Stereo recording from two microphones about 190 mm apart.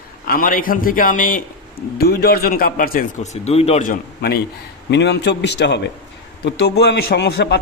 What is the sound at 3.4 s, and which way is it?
Speech, 35° left (ahead or behind).